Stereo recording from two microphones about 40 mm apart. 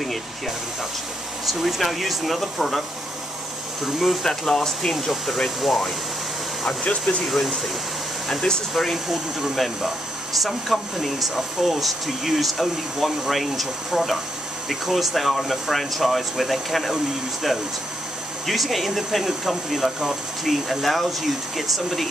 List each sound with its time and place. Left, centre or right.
1.4 s speech: centre
3.8 s speech: centre
4.2 s speech: centre
5.1 s speech: centre
6.8 s speech: left
7.2 s speech: centre
8.3 s speech: centre
8.7 s speech: centre
18.5 s speech: centre